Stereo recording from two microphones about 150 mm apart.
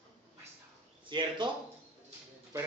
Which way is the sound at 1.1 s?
30° right (ahead or behind).